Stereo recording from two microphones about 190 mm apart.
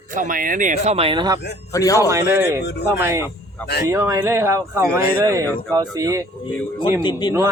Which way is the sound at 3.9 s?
15° right (ahead or behind).